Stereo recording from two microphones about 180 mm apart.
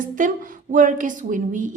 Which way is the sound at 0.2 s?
45° right (ahead or behind).